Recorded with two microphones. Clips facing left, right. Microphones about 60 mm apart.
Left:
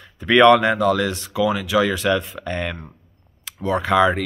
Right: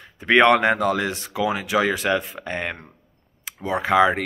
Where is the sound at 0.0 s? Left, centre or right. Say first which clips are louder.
Left 3 dB; right.